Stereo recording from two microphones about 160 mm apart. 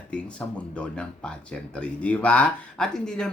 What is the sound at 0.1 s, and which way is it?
Speech, 5° left (ahead or behind).